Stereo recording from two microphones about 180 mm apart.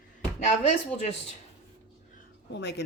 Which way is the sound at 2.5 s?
70° left (ahead or behind).